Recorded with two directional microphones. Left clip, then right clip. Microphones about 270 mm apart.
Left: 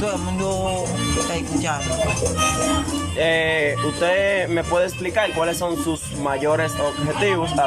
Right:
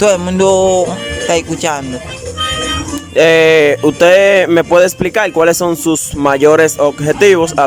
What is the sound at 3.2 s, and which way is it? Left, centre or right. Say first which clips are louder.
Speech: right 13 dB; right.